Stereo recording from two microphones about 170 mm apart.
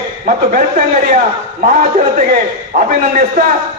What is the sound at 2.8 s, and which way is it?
Speech, 50° right (ahead or behind).